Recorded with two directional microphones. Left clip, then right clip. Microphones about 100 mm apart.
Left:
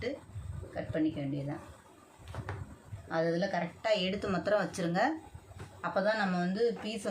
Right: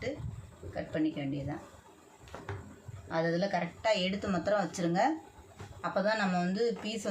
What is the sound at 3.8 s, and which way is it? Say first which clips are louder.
Speech: right 1 dB; 20° left (ahead or behind).